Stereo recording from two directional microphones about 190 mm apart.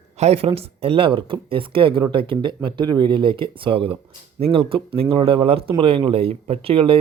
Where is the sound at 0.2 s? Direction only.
30° right (ahead or behind).